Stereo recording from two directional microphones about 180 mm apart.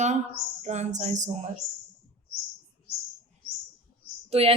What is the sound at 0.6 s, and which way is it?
Speech, 40° right (ahead or behind).